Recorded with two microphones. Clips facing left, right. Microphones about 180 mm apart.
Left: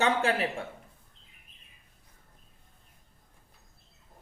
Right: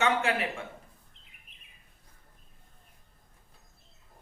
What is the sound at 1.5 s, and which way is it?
Bird, 65° right (ahead or behind).